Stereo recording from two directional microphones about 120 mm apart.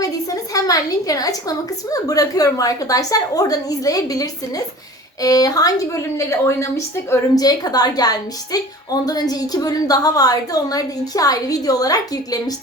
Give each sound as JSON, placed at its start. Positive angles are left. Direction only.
{"t": 0.0, "sound": "a woman's voice", "side_deg": 30}